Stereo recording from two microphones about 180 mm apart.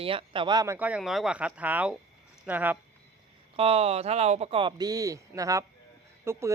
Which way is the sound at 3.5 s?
30° right (ahead or behind).